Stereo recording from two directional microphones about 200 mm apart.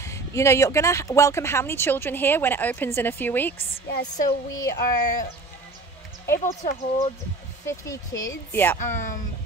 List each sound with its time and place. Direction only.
0.0 s speech: 15° left (ahead or behind)
6.3 s speech: 45° left (ahead or behind)
7.6 s speech: 15° left (ahead or behind)
8.7 s speech: 40° left (ahead or behind)